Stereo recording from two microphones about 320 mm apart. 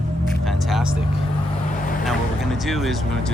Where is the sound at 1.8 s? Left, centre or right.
Left.